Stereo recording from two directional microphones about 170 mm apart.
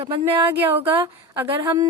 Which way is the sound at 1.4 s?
20° right (ahead or behind).